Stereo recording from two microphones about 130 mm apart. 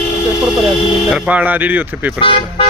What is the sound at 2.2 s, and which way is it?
Speech, 45° left (ahead or behind).